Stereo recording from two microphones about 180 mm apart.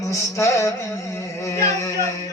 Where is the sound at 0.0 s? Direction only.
15° left (ahead or behind).